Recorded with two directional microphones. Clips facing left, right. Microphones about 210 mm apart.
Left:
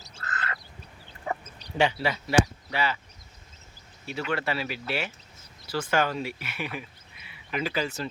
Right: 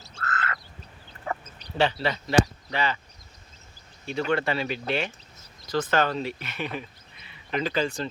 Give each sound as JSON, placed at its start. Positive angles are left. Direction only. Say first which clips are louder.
{"t": 0.0, "sound": "frog", "louder": "right 5 dB", "side_deg": 15}
{"t": 1.8, "sound": "speech", "louder": "right 1 dB", "side_deg": 10}
{"t": 4.0, "sound": "speech", "louder": "right 4 dB", "side_deg": 5}